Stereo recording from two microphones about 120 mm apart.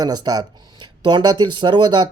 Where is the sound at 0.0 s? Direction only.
35° right (ahead or behind).